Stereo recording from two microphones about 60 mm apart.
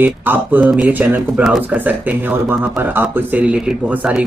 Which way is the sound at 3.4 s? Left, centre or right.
Right.